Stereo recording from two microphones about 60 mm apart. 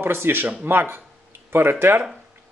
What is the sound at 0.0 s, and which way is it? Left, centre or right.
Speech, right.